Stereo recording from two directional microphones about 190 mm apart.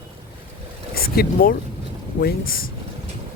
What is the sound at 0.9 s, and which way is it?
Speech, 55° left (ahead or behind).